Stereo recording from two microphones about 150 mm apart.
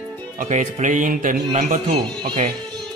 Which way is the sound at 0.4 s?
55° right (ahead or behind).